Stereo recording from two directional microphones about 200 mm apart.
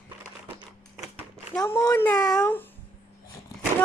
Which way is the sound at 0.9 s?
Centre (ahead or behind).